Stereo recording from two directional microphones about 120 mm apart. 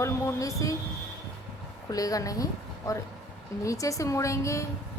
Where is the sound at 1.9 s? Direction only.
30° left (ahead or behind).